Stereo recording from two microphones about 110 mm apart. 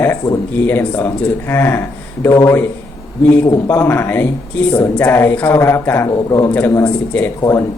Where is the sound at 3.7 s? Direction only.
20° left (ahead or behind).